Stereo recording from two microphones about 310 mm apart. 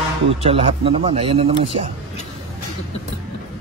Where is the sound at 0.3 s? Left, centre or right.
Centre.